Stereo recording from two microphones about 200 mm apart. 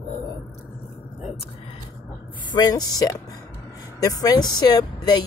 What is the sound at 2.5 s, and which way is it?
Speech, 20° left (ahead or behind).